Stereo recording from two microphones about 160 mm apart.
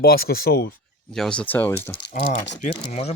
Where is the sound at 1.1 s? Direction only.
5° left (ahead or behind).